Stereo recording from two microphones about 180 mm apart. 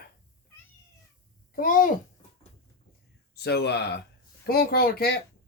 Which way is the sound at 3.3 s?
65° left (ahead or behind).